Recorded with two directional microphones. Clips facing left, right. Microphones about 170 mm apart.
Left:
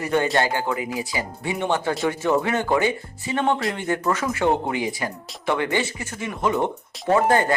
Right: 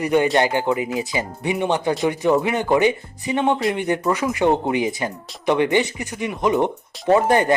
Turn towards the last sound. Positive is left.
turn(degrees=-20)  # may be behind; listen again after turning